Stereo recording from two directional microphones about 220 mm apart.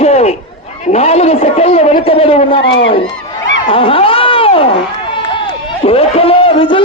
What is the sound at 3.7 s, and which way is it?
Run, 25° left (ahead or behind).